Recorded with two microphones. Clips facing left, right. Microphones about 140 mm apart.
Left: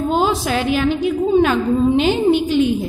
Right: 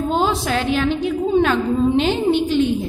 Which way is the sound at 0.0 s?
5° left (ahead or behind).